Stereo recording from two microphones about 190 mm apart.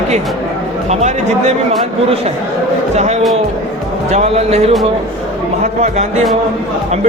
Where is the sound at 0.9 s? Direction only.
35° right (ahead or behind).